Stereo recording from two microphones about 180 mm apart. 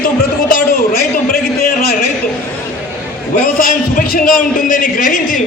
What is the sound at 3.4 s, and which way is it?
A man's voice, 50° left (ahead or behind).